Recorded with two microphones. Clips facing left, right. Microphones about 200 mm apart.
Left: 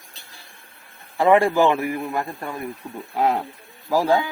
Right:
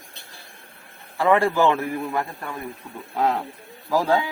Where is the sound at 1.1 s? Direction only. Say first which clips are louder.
Left 3 dB; 15° left (ahead or behind).